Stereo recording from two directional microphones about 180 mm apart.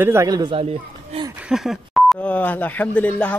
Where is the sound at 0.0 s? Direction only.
15° right (ahead or behind).